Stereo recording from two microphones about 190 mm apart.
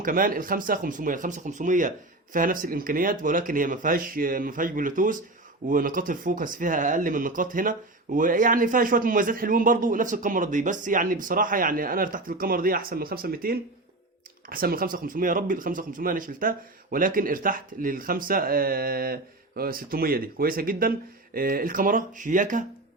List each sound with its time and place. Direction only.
0.0 s speech: 45° right (ahead or behind)